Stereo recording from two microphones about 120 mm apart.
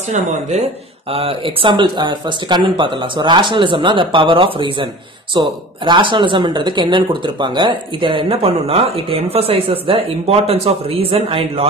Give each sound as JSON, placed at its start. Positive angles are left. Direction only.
{"t": 0.1, "sound": "speech", "side_deg": -70}
{"t": 1.1, "sound": "speech", "side_deg": -50}